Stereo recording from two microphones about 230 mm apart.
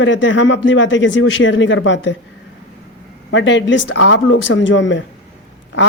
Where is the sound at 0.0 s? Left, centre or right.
Left.